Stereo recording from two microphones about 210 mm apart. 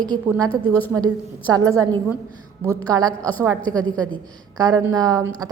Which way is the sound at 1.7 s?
15° right (ahead or behind).